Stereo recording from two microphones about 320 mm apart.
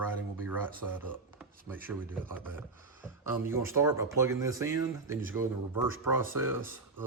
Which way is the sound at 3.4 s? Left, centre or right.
Centre.